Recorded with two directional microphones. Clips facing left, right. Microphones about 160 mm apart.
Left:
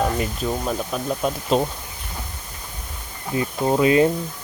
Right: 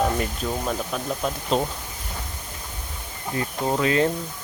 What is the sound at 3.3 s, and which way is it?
Speech, 15° left (ahead or behind).